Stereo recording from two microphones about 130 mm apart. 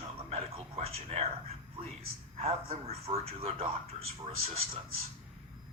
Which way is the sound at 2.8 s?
50° right (ahead or behind).